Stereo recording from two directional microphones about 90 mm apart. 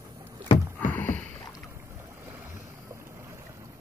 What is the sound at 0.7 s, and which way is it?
Rowboat, 20° left (ahead or behind).